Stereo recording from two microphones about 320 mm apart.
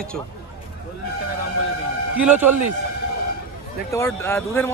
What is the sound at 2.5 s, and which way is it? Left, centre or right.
Speech, right.